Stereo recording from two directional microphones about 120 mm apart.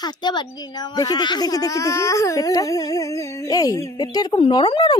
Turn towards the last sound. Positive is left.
turn(degrees=40)  # may be behind; listen again after turning